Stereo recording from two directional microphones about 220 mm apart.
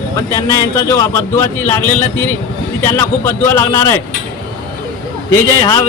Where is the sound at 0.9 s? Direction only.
15° left (ahead or behind).